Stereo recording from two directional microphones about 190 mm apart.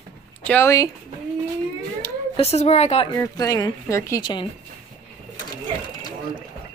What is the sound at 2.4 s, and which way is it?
Speech, 35° left (ahead or behind).